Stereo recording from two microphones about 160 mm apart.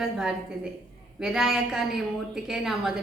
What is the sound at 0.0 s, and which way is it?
A woman's voice, 5° right (ahead or behind).